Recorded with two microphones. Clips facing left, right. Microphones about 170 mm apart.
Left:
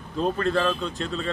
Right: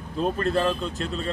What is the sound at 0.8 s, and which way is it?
Speech, centre (ahead or behind).